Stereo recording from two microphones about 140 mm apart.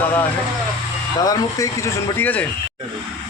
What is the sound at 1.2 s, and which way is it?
Speech, 25° left (ahead or behind).